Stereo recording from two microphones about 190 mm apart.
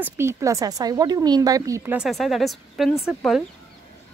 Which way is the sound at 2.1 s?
Centre (ahead or behind).